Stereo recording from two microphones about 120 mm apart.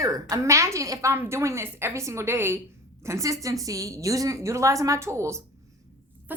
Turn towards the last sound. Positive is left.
turn(degrees=-15)  # may be behind; listen again after turning